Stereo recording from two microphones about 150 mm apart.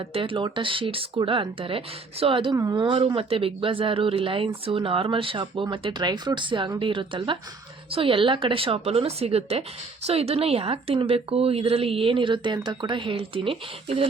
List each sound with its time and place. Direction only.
0.1 s speech: 35° right (ahead or behind)
2.8 s speech: 35° right (ahead or behind)